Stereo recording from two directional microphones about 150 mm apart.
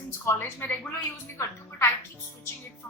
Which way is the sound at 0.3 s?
15° left (ahead or behind).